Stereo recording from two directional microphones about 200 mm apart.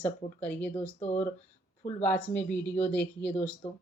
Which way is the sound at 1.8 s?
40° left (ahead or behind).